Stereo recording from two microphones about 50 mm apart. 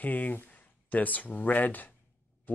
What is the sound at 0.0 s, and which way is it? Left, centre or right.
Speech, left.